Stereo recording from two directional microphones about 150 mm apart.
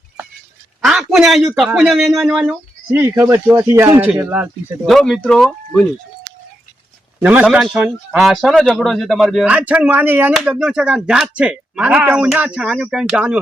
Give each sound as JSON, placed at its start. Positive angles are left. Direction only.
{"t": 0.9, "sound": "a sound", "side_deg": 0}
{"t": 1.5, "sound": "a man's voice", "side_deg": -5}
{"t": 2.9, "sound": "speech", "side_deg": -15}
{"t": 4.9, "sound": "a man's voice", "side_deg": 0}
{"t": 7.2, "sound": "a man's voice", "side_deg": -10}